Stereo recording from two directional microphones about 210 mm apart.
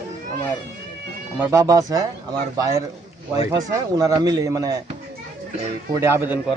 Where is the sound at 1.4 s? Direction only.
15° right (ahead or behind).